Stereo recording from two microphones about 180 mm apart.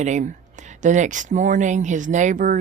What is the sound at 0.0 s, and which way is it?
Speech, 40° right (ahead or behind).